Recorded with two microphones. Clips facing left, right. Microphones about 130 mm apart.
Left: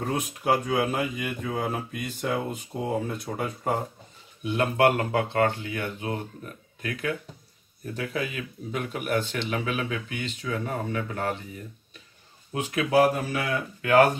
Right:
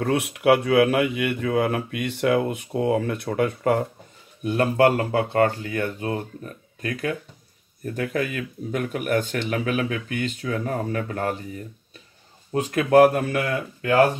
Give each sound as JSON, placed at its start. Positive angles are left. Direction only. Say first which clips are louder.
{"t": 0.0, "sound": "speech", "louder": "right 7 dB", "side_deg": -70}
{"t": 4.4, "sound": "speech", "louder": "right 4 dB", "side_deg": -40}
{"t": 12.5, "sound": "speech", "louder": "right 6 dB", "side_deg": -45}
{"t": 13.1, "sound": "speech", "louder": "right 4 dB", "side_deg": -55}